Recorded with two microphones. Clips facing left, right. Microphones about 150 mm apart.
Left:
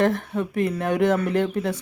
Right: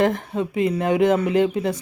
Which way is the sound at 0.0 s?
15° right (ahead or behind).